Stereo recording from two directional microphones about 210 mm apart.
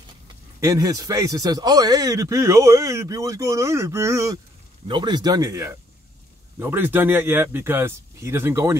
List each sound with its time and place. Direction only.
0.6 s speech: 15° right (ahead or behind)